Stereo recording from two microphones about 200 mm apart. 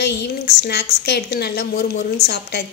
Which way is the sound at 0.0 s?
55° left (ahead or behind).